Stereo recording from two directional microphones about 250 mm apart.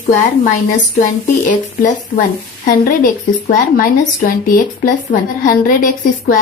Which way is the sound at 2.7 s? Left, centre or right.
Left.